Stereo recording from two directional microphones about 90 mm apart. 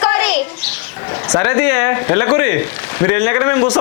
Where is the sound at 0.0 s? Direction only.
20° left (ahead or behind).